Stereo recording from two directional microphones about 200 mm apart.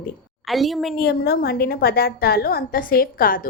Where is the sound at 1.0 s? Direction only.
50° left (ahead or behind).